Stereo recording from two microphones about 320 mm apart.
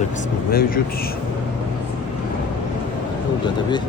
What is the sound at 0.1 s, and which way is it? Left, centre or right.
Speech, left.